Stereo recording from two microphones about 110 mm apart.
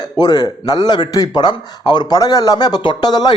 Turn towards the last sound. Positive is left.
turn(degrees=40)  # may be behind; listen again after turning